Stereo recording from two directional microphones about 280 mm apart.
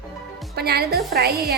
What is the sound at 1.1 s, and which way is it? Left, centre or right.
Music, right.